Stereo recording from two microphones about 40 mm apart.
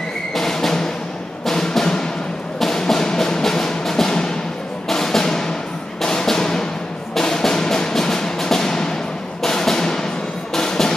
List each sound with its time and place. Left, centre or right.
0.3 s music: centre
6.0 s a sound: centre
7.2 s music: centre